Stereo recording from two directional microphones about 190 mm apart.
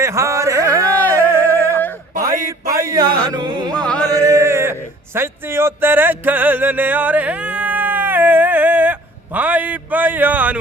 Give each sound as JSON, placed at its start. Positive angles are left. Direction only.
{"t": 0.0, "sound": "carnatic music", "side_deg": -15}
{"t": 1.2, "sound": "a sound", "side_deg": -15}
{"t": 2.3, "sound": "a sound", "side_deg": -50}
{"t": 2.9, "sound": "music", "side_deg": -20}
{"t": 3.8, "sound": "music", "side_deg": 5}
{"t": 4.1, "sound": "speech", "side_deg": -15}